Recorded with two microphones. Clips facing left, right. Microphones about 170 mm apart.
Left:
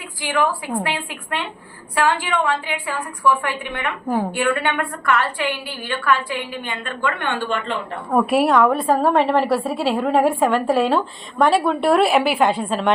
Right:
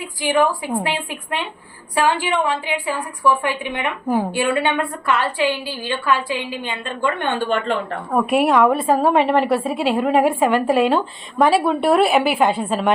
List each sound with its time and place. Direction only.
0.3 s a woman's voice: 15° right (ahead or behind)
6.5 s a woman's voice: 25° right (ahead or behind)
8.1 s a woman's voice: centre (ahead or behind)